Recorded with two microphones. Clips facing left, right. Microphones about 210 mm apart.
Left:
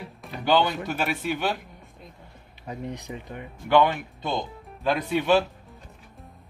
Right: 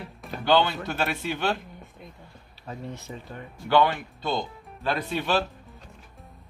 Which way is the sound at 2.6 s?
15° left (ahead or behind).